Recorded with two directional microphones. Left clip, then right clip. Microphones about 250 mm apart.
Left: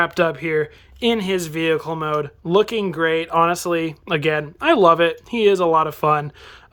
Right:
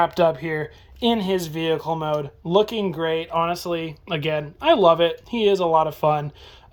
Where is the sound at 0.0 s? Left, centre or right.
Centre.